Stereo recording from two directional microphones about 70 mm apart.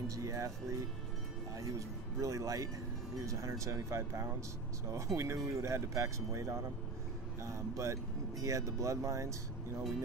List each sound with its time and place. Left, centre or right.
0.1 s speech: right
2.1 s speech: right